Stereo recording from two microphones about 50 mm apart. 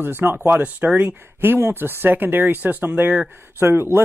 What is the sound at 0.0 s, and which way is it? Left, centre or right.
Speech, right.